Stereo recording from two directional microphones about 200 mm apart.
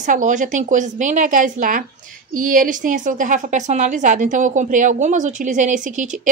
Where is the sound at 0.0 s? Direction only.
40° right (ahead or behind).